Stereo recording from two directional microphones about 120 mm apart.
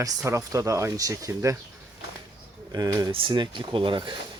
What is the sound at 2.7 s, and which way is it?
Speech, 30° right (ahead or behind).